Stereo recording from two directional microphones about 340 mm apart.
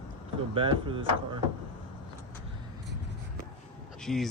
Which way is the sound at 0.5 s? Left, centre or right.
Centre.